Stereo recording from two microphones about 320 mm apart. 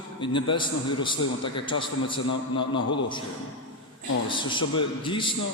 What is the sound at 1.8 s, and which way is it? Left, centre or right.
Speech, centre.